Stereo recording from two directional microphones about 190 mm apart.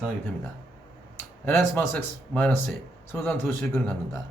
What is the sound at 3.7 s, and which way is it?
Speech, 5° left (ahead or behind).